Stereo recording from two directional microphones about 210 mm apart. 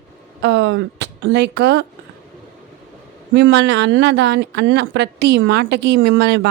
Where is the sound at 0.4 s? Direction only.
60° right (ahead or behind).